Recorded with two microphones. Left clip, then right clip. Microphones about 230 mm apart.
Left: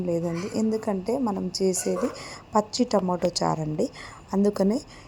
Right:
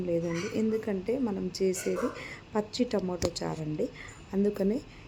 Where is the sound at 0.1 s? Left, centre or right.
Centre.